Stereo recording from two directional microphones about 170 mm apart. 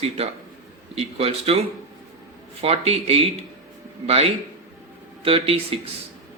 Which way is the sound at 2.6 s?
35° right (ahead or behind).